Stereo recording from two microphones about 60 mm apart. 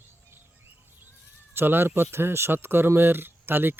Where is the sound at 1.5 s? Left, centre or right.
Right.